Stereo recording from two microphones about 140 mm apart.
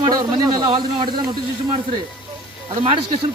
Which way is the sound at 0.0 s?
30° right (ahead or behind).